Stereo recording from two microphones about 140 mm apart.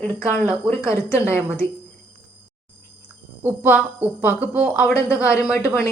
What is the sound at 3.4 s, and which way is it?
A woman's voice, 15° right (ahead or behind).